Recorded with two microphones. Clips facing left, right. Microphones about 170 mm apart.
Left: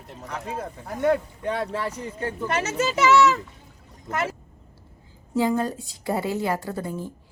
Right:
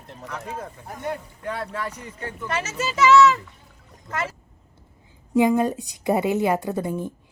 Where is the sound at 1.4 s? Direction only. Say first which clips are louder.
Left 2 dB; 25° left (ahead or behind).